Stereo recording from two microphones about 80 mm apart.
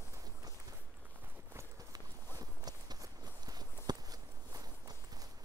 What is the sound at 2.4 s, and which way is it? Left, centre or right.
Walk, right.